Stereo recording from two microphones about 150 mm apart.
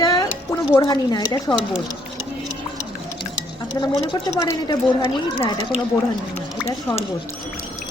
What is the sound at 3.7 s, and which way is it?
A woman's voice, 25° left (ahead or behind).